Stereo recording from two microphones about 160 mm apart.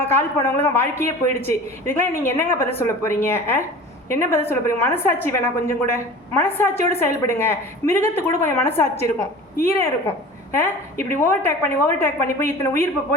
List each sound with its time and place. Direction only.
0.0 s a woman's voice: 15° left (ahead or behind)